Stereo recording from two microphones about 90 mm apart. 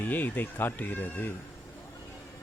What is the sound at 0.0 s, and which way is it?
Speech, 20° left (ahead or behind).